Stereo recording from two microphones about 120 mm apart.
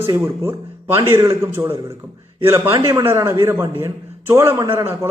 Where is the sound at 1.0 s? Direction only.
25° right (ahead or behind).